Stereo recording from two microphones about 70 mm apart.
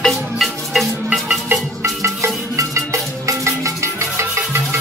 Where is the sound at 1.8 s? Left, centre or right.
Right.